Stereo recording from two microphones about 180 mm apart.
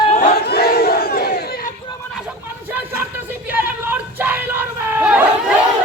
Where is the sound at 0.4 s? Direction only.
60° left (ahead or behind).